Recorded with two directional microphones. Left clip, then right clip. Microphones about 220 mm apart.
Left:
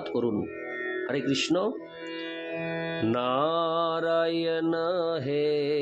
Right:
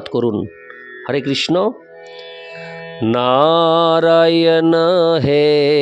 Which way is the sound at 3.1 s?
50° right (ahead or behind).